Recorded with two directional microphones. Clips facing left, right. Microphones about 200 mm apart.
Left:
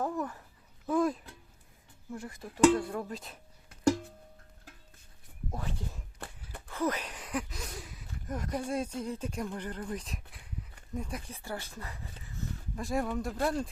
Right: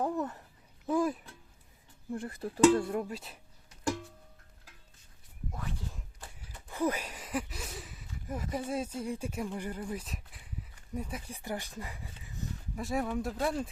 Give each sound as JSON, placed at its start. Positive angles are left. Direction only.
{"t": 0.0, "sound": "babbling", "side_deg": -20}
{"t": 0.9, "sound": "a sound", "side_deg": -10}
{"t": 2.1, "sound": "speech", "side_deg": -30}
{"t": 3.0, "sound": "speech", "side_deg": -10}
{"t": 6.2, "sound": "a sound", "side_deg": 60}
{"t": 6.7, "sound": "speech", "side_deg": -15}
{"t": 12.8, "sound": "speech", "side_deg": -5}